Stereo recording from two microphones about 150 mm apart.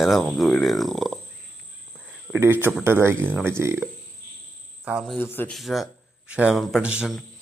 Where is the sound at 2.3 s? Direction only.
15° right (ahead or behind).